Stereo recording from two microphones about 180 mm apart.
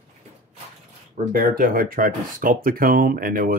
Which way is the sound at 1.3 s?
50° right (ahead or behind).